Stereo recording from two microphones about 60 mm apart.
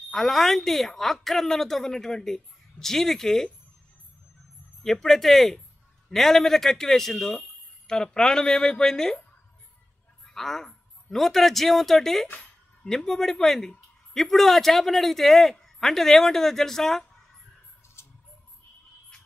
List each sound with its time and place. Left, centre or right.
0.1 s a woman's voice: centre
4.8 s a woman's voice: centre
10.2 s a woman's voice: centre
18.0 s a sound: left